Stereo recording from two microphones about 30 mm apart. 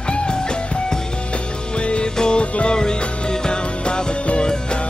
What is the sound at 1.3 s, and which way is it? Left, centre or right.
Music, left.